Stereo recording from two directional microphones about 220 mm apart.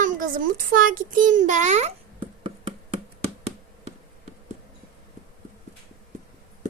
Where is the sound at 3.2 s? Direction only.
30° right (ahead or behind).